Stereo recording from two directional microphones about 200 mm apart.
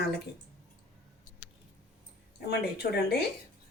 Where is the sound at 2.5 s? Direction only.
55° left (ahead or behind).